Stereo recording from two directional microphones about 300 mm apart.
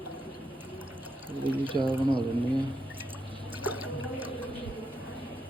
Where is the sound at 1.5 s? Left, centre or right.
Centre.